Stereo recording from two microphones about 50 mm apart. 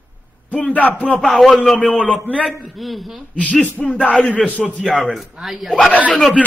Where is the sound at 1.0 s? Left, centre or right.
Left.